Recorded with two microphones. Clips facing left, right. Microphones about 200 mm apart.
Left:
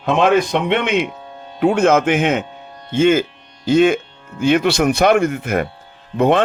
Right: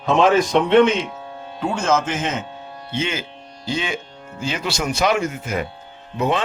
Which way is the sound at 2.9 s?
50° left (ahead or behind).